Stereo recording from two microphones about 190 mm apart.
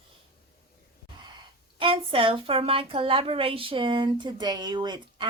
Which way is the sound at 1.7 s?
30° right (ahead or behind).